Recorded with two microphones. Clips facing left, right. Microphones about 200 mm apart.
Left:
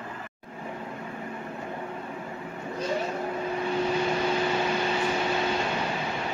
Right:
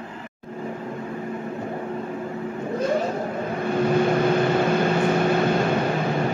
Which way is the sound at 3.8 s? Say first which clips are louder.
Right 8 dB; 55° right (ahead or behind).